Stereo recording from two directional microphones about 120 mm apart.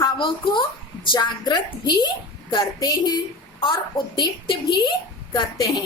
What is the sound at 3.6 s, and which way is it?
A woman's voice, 45° left (ahead or behind).